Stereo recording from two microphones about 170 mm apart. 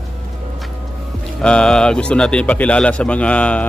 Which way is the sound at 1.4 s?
5° left (ahead or behind).